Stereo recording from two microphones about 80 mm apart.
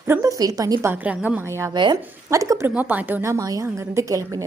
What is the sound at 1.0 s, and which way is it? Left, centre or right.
Speech, centre.